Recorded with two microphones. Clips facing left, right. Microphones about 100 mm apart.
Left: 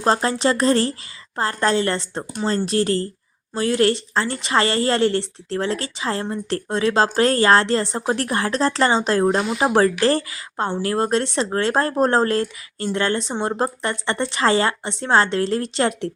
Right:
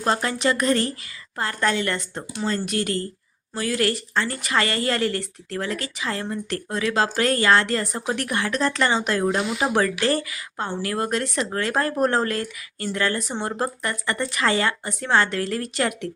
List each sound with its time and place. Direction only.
0.0 s a woman's voice: 30° left (ahead or behind)